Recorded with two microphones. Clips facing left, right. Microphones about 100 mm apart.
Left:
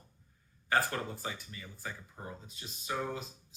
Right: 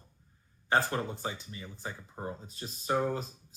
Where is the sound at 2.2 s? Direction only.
40° right (ahead or behind).